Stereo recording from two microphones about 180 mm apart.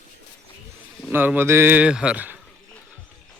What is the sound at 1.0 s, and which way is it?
Speech, 10° right (ahead or behind).